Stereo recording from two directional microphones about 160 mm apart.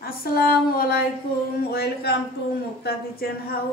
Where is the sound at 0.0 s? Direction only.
70° left (ahead or behind).